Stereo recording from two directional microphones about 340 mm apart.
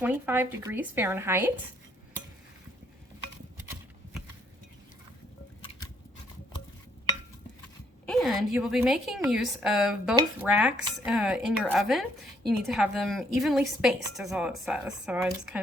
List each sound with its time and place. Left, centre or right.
0.0 s speech: centre
8.0 s a woman's voice: centre